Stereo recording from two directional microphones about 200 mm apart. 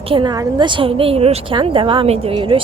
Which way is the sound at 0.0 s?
25° right (ahead or behind).